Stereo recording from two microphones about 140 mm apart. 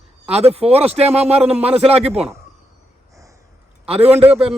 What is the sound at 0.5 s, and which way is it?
Speech, 45° right (ahead or behind).